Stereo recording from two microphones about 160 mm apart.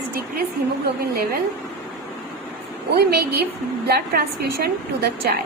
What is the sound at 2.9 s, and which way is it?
A woman's voice, 75° right (ahead or behind).